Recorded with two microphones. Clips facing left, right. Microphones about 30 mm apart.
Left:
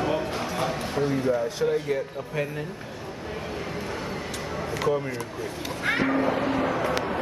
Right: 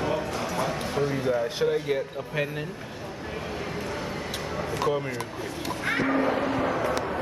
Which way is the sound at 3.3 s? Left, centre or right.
Centre.